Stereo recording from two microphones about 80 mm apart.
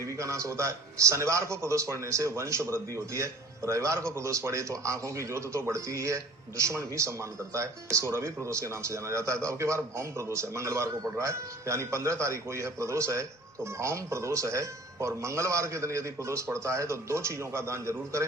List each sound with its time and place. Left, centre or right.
0.1 s a man's voice: right